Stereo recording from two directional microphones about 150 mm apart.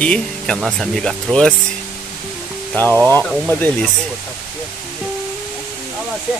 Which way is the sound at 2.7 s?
10° left (ahead or behind).